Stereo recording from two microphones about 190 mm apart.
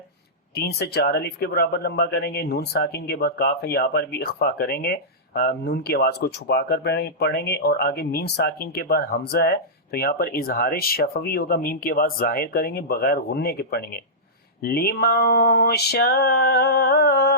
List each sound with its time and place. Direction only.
0.5 s speech: 55° left (ahead or behind)